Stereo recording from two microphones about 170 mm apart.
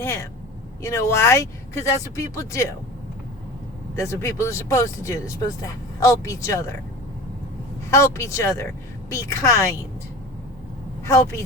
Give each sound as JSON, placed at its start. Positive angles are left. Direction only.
{"t": 0.0, "sound": "speech", "side_deg": 15}
{"t": 3.9, "sound": "speech", "side_deg": 15}
{"t": 7.9, "sound": "speech", "side_deg": 15}
{"t": 11.0, "sound": "speech", "side_deg": 15}